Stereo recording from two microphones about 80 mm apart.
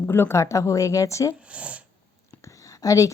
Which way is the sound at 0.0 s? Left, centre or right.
Left.